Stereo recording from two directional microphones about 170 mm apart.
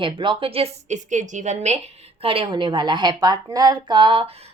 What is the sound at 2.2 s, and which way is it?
A woman's voice, 30° right (ahead or behind).